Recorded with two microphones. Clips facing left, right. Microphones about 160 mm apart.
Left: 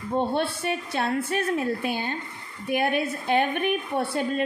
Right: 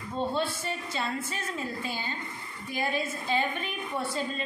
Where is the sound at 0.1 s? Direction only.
65° left (ahead or behind).